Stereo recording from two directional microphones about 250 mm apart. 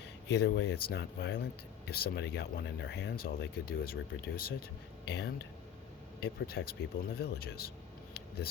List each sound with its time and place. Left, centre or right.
0.3 s speech: left